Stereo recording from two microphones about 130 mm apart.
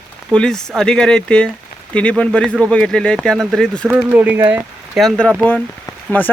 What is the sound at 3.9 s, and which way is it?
Speech, 10° right (ahead or behind).